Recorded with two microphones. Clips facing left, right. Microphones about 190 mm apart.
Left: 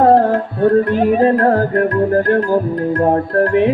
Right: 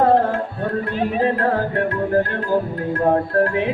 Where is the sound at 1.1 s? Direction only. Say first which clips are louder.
Left 6 dB; 45° left (ahead or behind).